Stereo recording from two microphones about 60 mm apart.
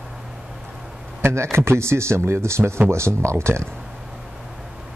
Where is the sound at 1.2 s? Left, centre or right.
Right.